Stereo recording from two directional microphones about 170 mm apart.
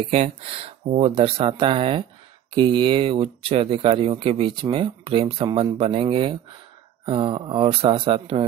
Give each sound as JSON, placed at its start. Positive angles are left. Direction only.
{"t": 0.1, "sound": "speech", "side_deg": -35}